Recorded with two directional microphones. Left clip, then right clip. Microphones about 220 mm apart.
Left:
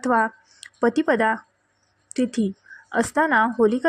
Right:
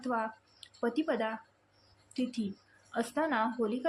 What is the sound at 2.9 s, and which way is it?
Speech, 40° left (ahead or behind).